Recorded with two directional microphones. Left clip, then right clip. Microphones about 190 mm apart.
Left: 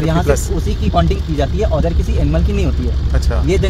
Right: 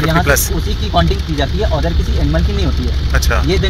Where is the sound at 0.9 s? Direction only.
30° left (ahead or behind).